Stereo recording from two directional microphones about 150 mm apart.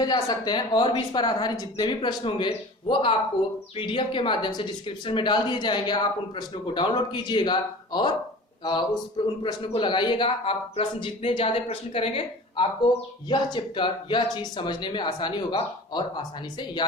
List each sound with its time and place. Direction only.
0.0 s a woman's voice: 25° left (ahead or behind)